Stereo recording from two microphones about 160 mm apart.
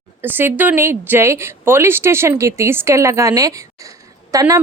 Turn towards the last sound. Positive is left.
turn(degrees=-20)  # may be behind; listen again after turning